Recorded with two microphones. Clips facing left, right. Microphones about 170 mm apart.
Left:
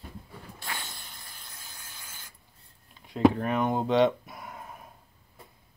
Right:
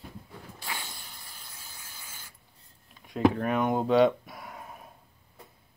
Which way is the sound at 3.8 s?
40° right (ahead or behind).